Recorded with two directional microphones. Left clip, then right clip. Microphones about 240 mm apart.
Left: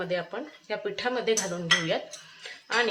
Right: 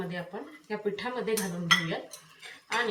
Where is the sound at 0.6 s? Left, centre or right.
Left.